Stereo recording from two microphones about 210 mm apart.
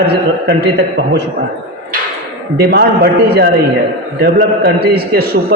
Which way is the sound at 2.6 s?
50° right (ahead or behind).